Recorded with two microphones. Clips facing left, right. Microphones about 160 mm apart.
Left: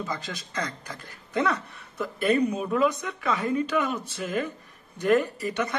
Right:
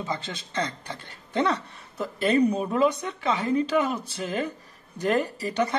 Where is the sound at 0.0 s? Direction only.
25° right (ahead or behind).